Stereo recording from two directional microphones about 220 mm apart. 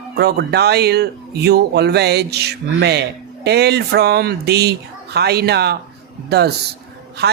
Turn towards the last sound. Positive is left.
turn(degrees=-50)  # may be behind; listen again after turning